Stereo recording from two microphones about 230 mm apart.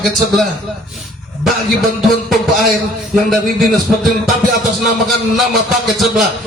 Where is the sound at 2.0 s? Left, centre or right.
Centre.